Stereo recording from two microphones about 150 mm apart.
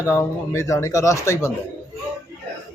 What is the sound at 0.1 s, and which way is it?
A man's voice, 20° left (ahead or behind).